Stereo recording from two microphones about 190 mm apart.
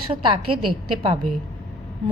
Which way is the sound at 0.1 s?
25° right (ahead or behind).